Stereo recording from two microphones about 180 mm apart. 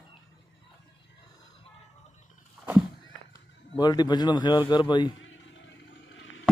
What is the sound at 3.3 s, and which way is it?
A man's voice, 20° left (ahead or behind).